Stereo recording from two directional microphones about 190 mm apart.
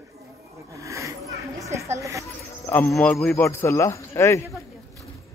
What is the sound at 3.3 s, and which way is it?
Speech, 15° left (ahead or behind).